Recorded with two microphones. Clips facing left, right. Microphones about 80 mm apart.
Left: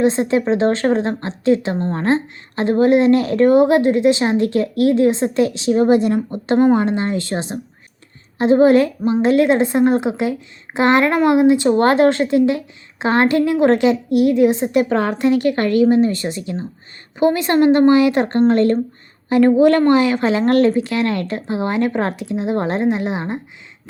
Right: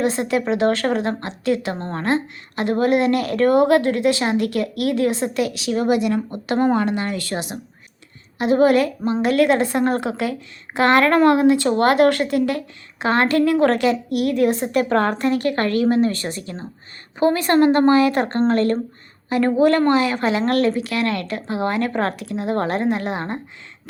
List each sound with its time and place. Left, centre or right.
0.0 s a woman's voice: left